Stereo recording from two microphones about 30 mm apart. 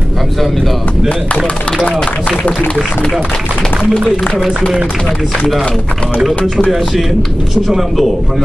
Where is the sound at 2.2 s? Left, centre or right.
Left.